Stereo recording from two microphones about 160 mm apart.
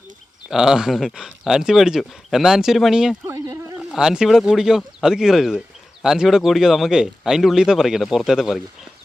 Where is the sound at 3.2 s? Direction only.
15° right (ahead or behind).